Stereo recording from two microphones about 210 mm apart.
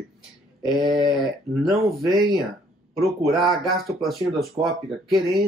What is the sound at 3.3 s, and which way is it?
Speech, centre (ahead or behind).